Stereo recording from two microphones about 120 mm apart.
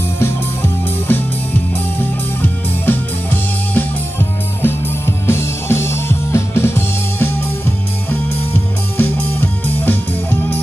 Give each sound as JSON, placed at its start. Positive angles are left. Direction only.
{"t": 0.2, "sound": "music", "side_deg": 20}
{"t": 2.4, "sound": "music", "side_deg": 15}